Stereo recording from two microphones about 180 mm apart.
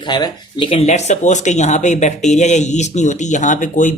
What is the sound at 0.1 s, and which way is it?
Speech, 25° left (ahead or behind).